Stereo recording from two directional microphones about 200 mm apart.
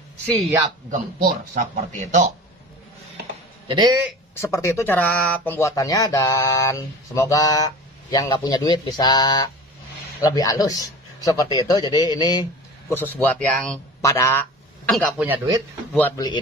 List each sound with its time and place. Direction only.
1.2 s speech: 40° right (ahead or behind)
3.6 s a man's voice: 25° right (ahead or behind)
4.4 s a man's voice: 15° left (ahead or behind)
12.9 s speech: 10° left (ahead or behind)
14.9 s a man's voice: centre (ahead or behind)